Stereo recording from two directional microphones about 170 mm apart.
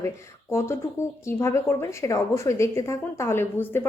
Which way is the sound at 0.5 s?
15° left (ahead or behind).